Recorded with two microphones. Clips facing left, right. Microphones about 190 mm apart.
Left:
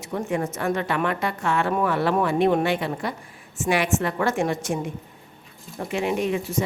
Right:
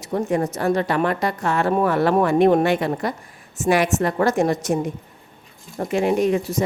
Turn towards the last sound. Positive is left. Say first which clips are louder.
# right 5 dB
turn(degrees=-40)  # may be behind; listen again after turning